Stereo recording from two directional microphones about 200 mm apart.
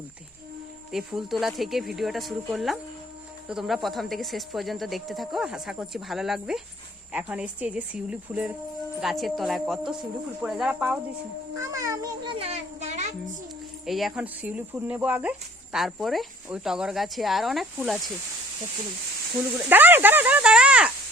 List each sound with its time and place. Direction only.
0.9 s speech: centre (ahead or behind)
11.5 s music: 15° right (ahead or behind); by 13.3 s 35° right (ahead or behind)
13.8 s speech: centre (ahead or behind)
19.6 s speech: 10° right (ahead or behind)